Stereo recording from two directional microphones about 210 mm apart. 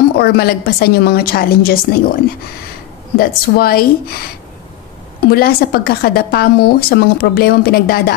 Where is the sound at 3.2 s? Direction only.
45° left (ahead or behind).